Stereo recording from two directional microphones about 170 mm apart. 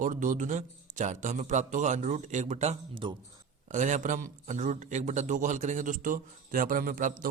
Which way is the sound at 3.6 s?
45° right (ahead or behind).